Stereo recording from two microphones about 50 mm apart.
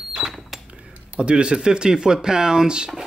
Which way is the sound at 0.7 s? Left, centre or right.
Right.